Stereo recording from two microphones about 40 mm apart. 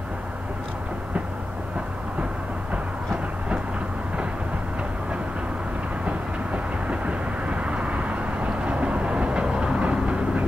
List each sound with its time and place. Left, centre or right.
6.0 s vehicle: right